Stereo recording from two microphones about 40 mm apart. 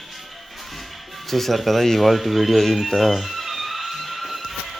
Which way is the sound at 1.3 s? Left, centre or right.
Centre.